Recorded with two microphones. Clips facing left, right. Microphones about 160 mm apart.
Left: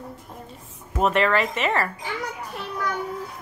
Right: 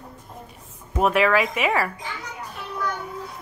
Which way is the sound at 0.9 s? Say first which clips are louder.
Right 1 dB; 5° right (ahead or behind).